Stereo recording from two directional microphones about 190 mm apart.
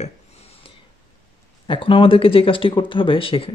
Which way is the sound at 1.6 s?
25° left (ahead or behind).